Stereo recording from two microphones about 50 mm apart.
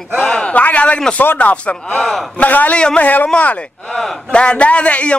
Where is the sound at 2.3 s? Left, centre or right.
Left.